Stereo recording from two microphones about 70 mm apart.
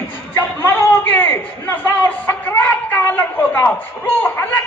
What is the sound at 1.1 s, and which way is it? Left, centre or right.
A man's voice, left.